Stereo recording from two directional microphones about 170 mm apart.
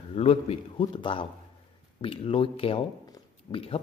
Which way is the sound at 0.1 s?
35° left (ahead or behind).